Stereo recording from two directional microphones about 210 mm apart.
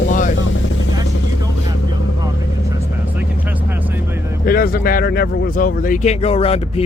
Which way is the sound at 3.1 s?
10° right (ahead or behind).